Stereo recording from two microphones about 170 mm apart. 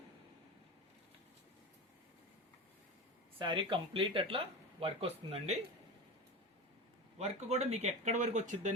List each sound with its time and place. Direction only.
3.3 s speech: 25° right (ahead or behind)
7.2 s speech: 40° right (ahead or behind)